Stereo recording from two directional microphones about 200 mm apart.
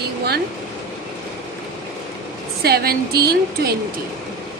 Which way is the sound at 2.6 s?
50° right (ahead or behind).